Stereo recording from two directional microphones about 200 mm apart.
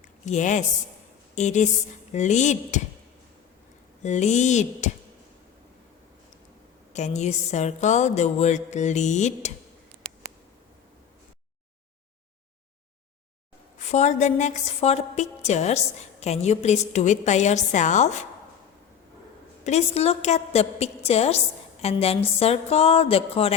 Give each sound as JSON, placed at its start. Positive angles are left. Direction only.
{"t": 0.3, "sound": "speech", "side_deg": 35}
{"t": 4.0, "sound": "speech", "side_deg": 35}
{"t": 6.9, "sound": "speech", "side_deg": 35}
{"t": 13.7, "sound": "speech", "side_deg": 35}
{"t": 19.6, "sound": "a woman's voice", "side_deg": 30}
{"t": 22.4, "sound": "music", "side_deg": 30}